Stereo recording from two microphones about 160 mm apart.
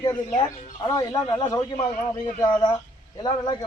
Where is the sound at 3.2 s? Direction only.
30° left (ahead or behind).